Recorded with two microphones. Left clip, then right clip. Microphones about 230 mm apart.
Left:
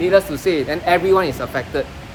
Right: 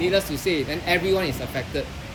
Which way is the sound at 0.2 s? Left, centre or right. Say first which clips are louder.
Left 6 dB; centre.